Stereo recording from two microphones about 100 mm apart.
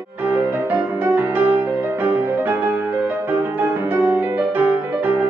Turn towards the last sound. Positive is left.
turn(degrees=-15)  # may be behind; listen again after turning